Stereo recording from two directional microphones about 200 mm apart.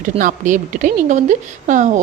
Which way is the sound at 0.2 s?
40° right (ahead or behind).